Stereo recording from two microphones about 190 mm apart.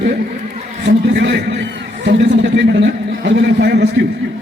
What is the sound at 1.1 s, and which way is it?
A man's voice, 65° right (ahead or behind).